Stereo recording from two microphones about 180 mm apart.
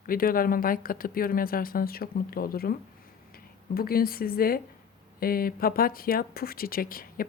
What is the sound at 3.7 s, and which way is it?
Speech, 55° left (ahead or behind).